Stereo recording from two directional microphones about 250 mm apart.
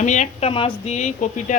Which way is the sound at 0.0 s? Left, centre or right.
Left.